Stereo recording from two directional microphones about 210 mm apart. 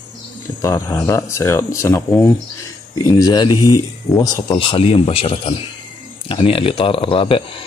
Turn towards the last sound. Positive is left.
turn(degrees=25)  # may be behind; listen again after turning